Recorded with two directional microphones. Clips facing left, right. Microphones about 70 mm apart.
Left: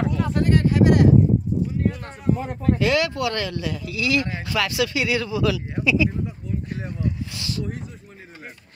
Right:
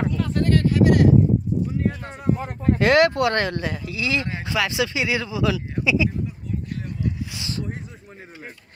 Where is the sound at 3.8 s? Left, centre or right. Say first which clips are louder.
Left 5 dB; right.